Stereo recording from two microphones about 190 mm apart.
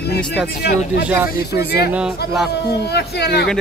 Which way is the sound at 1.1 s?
10° right (ahead or behind).